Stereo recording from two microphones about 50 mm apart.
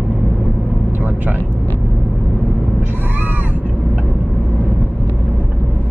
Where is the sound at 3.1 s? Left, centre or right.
Right.